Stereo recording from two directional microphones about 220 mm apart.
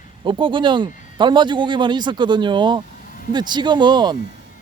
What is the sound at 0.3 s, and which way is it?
Speech, 20° right (ahead or behind).